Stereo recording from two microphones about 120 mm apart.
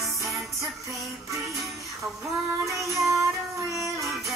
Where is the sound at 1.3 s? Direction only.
Centre (ahead or behind).